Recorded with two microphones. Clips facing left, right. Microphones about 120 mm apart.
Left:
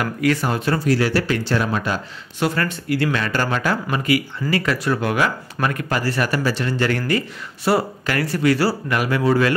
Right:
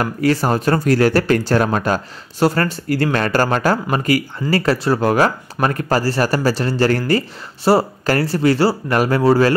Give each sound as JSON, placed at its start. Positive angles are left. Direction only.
{"t": 0.0, "sound": "speech", "side_deg": -35}